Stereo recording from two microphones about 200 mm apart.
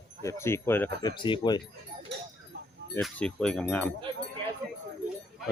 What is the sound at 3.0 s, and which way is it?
Speech, 5° left (ahead or behind).